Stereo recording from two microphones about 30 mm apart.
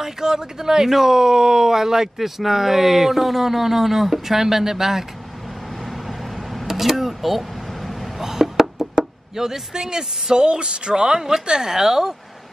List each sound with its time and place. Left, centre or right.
0.0 s speech: right
5.9 s vehicle: centre
8.2 s speech: centre